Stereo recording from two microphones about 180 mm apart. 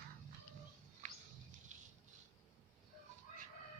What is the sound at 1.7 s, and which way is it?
Rattle, 45° right (ahead or behind).